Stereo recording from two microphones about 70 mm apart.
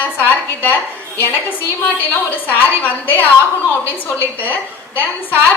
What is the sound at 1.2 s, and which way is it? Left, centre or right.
A woman's voice, left.